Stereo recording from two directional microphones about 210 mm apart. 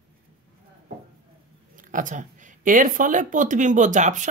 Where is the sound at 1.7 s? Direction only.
40° right (ahead or behind).